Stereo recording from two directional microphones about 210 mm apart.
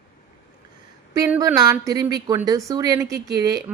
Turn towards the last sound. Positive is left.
turn(degrees=-15)  # may be behind; listen again after turning